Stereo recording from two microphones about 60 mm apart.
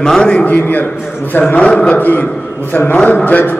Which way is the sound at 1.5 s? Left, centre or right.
Centre.